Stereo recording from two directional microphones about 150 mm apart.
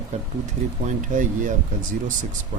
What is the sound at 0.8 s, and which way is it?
Speech, 55° right (ahead or behind).